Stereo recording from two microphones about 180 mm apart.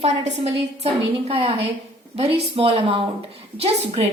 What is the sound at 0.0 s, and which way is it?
A woman's voice, 35° right (ahead or behind).